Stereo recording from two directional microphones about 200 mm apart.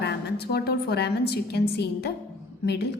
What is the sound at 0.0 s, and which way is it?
A woman's voice, 55° left (ahead or behind).